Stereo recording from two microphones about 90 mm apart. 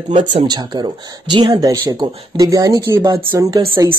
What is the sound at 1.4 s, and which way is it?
Speech, 45° right (ahead or behind).